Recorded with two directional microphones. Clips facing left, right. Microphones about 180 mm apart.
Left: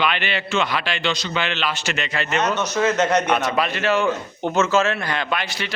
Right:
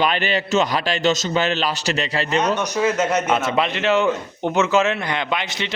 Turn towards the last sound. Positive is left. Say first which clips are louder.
# right 1 dB
turn(degrees=-20)  # may be behind; listen again after turning